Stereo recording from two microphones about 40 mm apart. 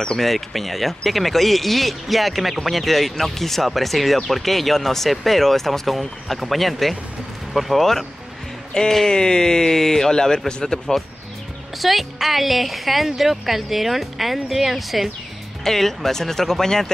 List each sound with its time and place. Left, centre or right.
0.2 s speech: centre
8.7 s speech: left
11.8 s speech: centre
15.6 s speech: centre